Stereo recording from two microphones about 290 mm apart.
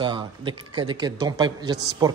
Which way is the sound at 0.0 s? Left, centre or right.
Centre.